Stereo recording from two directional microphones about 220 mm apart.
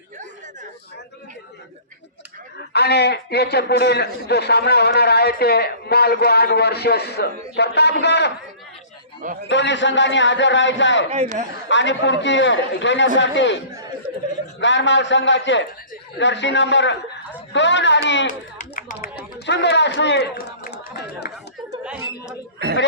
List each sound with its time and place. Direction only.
2.7 s a man's voice: 50° left (ahead or behind)
9.5 s a man's voice: 55° left (ahead or behind)
11.1 s a man's voice: 30° right (ahead or behind)
11.7 s a man's voice: 55° left (ahead or behind)
14.6 s a man's voice: 55° left (ahead or behind)
18.3 s speech: 35° left (ahead or behind)